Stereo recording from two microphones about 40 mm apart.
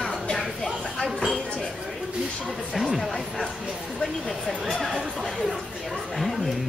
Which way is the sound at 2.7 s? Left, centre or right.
Centre.